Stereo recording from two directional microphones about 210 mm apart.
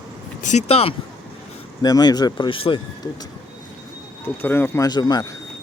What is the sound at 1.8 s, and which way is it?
Speech, 20° left (ahead or behind).